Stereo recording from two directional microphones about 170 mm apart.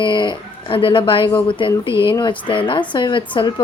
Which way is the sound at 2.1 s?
30° left (ahead or behind).